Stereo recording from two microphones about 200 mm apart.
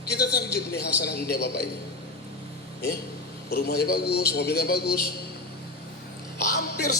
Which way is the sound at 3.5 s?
55° left (ahead or behind).